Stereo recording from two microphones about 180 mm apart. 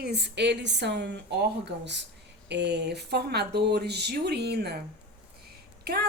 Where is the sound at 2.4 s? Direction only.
70° right (ahead or behind).